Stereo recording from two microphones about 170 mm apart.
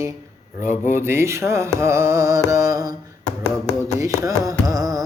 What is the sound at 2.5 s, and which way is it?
Mantra, 20° right (ahead or behind).